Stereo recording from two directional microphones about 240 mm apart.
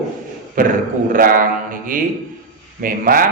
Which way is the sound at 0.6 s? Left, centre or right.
Right.